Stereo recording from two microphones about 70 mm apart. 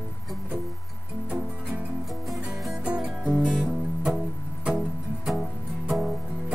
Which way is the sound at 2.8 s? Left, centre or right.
Centre.